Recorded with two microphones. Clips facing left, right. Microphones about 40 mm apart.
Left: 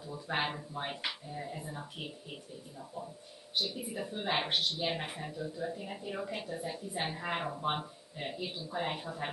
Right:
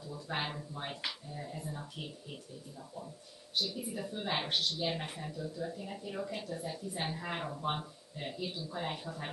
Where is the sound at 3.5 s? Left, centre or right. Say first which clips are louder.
Left 1 dB; centre.